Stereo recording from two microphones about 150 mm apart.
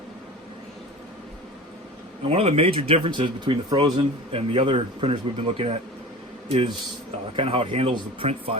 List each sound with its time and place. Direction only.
2.3 s speech: 45° right (ahead or behind)